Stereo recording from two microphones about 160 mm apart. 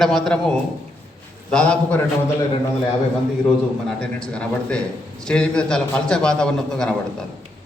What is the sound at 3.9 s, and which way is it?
A man's voice, 5° left (ahead or behind).